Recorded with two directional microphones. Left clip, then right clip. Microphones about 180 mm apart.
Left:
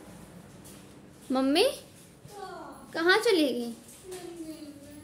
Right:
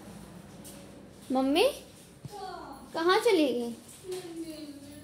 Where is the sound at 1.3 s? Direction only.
15° left (ahead or behind).